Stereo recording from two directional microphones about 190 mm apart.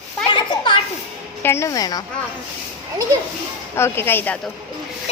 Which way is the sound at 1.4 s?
15° left (ahead or behind).